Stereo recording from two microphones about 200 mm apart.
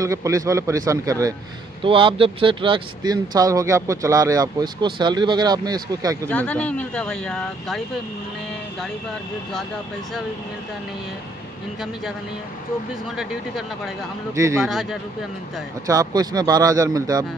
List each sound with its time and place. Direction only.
0.0 s speech: 15° right (ahead or behind)
6.2 s speech: 5° left (ahead or behind)
13.1 s speech: centre (ahead or behind)
14.3 s speech: 15° right (ahead or behind)
14.7 s speech: centre (ahead or behind)
15.9 s speech: 20° right (ahead or behind)